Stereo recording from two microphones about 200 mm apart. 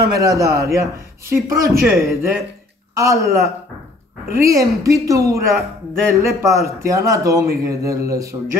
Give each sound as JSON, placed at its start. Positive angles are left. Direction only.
{"t": 0.0, "sound": "speech", "side_deg": -15}